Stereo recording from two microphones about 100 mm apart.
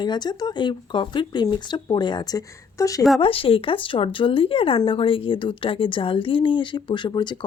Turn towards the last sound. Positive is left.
turn(degrees=50)  # may be behind; listen again after turning